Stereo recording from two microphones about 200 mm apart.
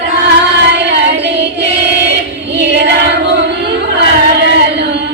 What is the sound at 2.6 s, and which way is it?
Female singing, 60° right (ahead or behind).